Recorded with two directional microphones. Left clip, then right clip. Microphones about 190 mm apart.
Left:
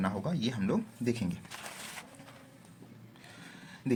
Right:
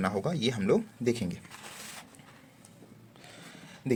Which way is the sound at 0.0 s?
35° right (ahead or behind).